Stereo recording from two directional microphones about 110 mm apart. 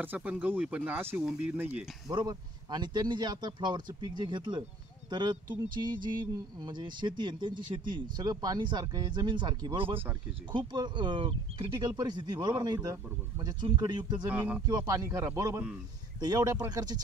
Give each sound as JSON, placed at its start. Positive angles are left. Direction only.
{"t": 0.0, "sound": "speech", "side_deg": -15}
{"t": 2.0, "sound": "speech", "side_deg": -40}
{"t": 14.3, "sound": "speech", "side_deg": -15}
{"t": 14.7, "sound": "a man's voice", "side_deg": -35}
{"t": 16.2, "sound": "speech", "side_deg": -35}